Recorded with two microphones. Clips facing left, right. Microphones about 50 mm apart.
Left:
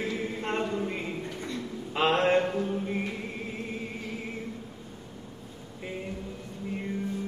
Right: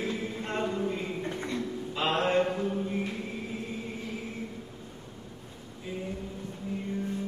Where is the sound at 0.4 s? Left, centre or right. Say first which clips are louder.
Left 2 dB; left.